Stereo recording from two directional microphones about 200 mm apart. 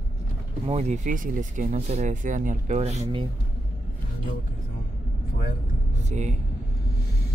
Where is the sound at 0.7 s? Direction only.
35° right (ahead or behind).